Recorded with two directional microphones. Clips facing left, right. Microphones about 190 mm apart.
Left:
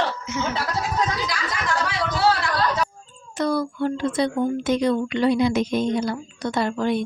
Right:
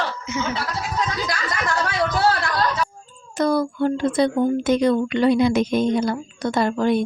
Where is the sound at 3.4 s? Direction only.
45° right (ahead or behind).